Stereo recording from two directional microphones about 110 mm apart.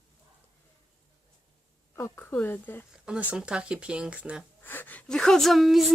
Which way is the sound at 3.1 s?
10° right (ahead or behind).